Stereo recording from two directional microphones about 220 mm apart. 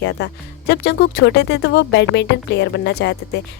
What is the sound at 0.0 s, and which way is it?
Speech, 50° left (ahead or behind).